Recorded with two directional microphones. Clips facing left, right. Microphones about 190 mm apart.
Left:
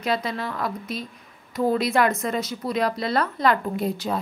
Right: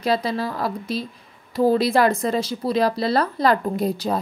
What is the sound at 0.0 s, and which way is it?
A woman's voice, 35° right (ahead or behind).